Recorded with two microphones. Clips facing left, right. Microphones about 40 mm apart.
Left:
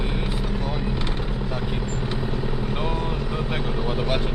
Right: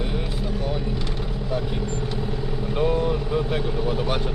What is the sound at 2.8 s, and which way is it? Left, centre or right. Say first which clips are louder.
Vehicle: right 9 dB; centre.